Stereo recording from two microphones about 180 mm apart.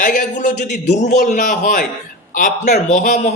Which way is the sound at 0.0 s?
45° left (ahead or behind).